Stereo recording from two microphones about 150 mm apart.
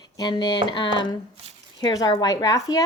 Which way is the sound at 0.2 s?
30° left (ahead or behind).